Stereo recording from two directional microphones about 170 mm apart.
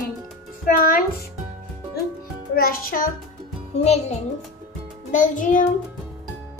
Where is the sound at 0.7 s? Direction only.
55° left (ahead or behind).